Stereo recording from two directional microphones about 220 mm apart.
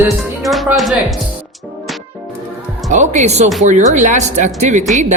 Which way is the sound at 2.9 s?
35° right (ahead or behind).